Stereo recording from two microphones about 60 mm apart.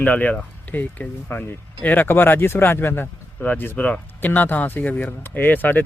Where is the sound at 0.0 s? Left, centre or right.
Left.